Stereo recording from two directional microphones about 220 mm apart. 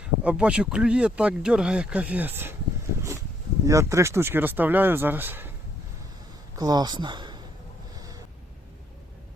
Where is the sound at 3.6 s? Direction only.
15° right (ahead or behind).